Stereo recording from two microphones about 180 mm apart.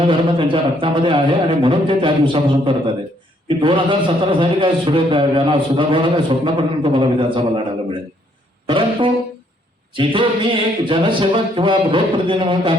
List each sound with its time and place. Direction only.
0.1 s a man's voice: 30° right (ahead or behind)
8.6 s music: 30° right (ahead or behind)
9.9 s a man's voice: 30° right (ahead or behind)